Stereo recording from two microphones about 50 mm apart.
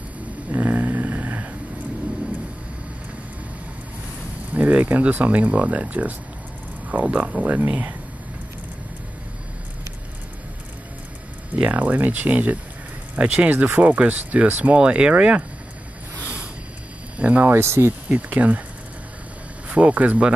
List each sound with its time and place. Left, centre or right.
0.5 s snoring: right
4.6 s speech: right
11.5 s speech: right
16.2 s a sound: right
17.2 s speech: right
17.5 s speech: right
18.0 s speech: right
19.7 s speech: right